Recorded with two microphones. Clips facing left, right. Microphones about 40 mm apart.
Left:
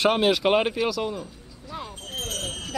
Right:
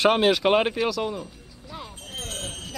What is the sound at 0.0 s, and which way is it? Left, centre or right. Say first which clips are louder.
Speech: right 1 dB; centre.